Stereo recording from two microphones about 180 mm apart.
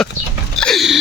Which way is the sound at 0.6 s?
Centre (ahead or behind).